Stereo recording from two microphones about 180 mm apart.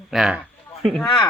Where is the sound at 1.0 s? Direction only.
25° left (ahead or behind).